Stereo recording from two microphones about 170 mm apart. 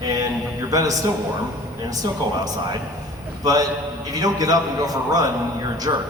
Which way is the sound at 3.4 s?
20° right (ahead or behind).